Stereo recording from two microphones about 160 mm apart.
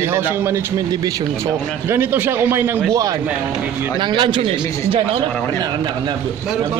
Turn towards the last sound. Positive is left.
turn(degrees=-30)  # may be behind; listen again after turning